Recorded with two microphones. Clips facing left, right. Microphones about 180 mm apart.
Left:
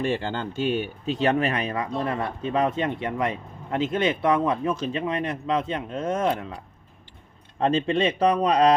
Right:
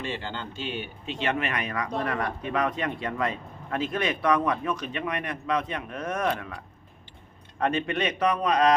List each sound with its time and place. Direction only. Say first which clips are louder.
0.0 s speech: left 7 dB; 45° left (ahead or behind); by 6.6 s 20° left (ahead or behind)
7.6 s speech: left 5 dB; 25° left (ahead or behind)